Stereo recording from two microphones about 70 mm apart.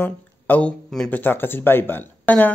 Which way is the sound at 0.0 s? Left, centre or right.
Left.